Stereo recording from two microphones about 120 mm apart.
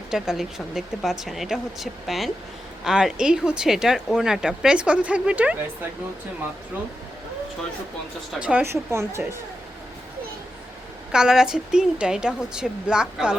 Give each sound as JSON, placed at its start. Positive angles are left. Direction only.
{"t": 0.1, "sound": "speech", "side_deg": -5}
{"t": 8.3, "sound": "speech", "side_deg": -10}
{"t": 8.6, "sound": "a woman's voice", "side_deg": -20}
{"t": 11.1, "sound": "speech", "side_deg": -5}